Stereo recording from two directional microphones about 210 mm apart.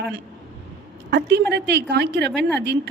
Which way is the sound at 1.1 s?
55° right (ahead or behind).